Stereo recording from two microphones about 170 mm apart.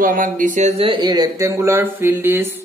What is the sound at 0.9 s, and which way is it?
Speech, 25° right (ahead or behind).